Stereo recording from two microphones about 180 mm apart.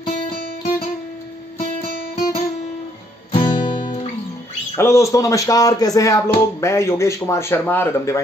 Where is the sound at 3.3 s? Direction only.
25° left (ahead or behind).